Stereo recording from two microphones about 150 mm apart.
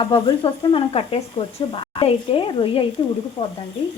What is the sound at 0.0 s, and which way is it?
Speech, 35° left (ahead or behind).